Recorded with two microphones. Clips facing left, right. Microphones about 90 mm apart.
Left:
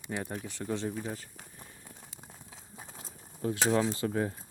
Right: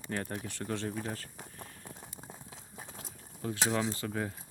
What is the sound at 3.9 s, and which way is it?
Speech, 25° left (ahead or behind).